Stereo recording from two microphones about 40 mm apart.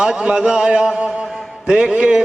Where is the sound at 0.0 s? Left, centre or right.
Centre.